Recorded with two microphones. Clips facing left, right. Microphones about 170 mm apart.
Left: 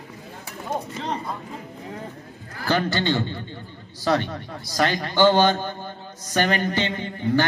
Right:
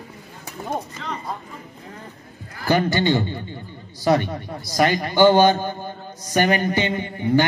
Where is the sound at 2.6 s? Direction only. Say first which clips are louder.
Right 3 dB; 15° right (ahead or behind).